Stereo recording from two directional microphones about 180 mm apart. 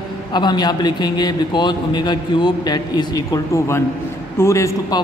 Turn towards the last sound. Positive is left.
turn(degrees=20)  # may be behind; listen again after turning